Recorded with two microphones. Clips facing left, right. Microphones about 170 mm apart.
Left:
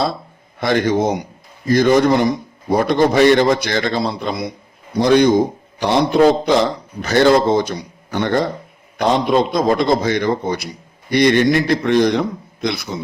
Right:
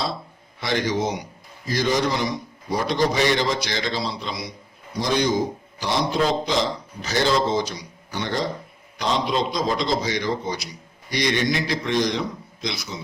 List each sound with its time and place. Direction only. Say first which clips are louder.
0.6 s a man's voice: left 7 dB; 55° left (ahead or behind)